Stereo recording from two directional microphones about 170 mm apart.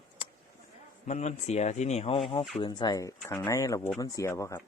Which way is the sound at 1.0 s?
40° left (ahead or behind).